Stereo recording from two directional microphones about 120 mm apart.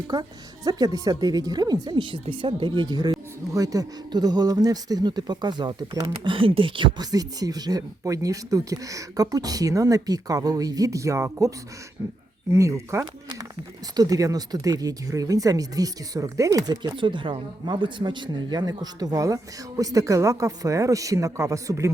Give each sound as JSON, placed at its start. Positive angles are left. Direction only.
{"t": 0.1, "sound": "speech", "side_deg": -30}